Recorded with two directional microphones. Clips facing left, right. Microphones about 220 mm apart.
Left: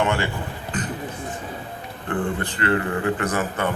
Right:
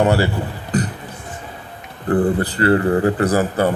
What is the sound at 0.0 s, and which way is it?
Speech, 40° right (ahead or behind).